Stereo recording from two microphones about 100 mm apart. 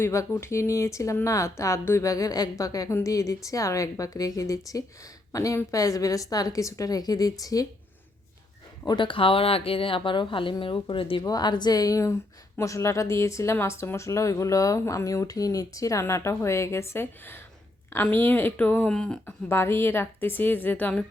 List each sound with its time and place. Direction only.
0.0 s speech: 30° left (ahead or behind)
8.9 s speech: 55° left (ahead or behind)
11.2 s speech: 40° left (ahead or behind); by 19.2 s 5° left (ahead or behind)
19.2 s speech: 25° left (ahead or behind)